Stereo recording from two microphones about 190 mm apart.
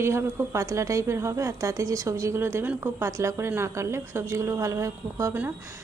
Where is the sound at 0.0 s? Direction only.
15° right (ahead or behind).